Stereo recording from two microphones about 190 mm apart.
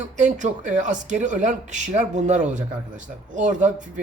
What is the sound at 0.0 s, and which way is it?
Speech, 40° right (ahead or behind).